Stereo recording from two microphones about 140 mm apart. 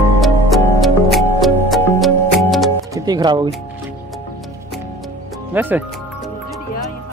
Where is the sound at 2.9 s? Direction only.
30° right (ahead or behind).